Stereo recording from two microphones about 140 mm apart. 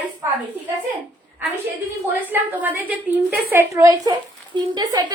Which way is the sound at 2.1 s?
15° right (ahead or behind).